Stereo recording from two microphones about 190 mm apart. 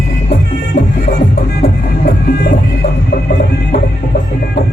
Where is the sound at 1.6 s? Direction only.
50° left (ahead or behind).